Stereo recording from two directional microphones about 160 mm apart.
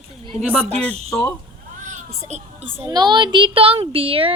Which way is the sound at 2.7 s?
15° right (ahead or behind).